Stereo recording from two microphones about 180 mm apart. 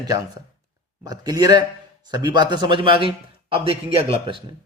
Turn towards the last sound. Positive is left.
turn(degrees=-30)  # may be behind; listen again after turning